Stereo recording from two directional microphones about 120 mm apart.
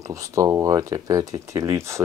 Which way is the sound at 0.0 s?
25° right (ahead or behind).